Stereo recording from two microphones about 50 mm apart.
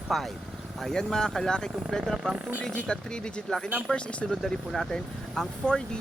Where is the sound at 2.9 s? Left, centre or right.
Centre.